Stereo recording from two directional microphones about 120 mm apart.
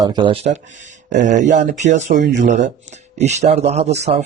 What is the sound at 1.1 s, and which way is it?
Speech, 90° right.